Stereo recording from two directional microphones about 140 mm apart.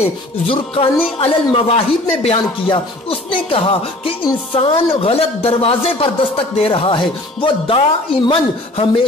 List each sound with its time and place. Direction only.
0.0 s a man's voice: 40° left (ahead or behind)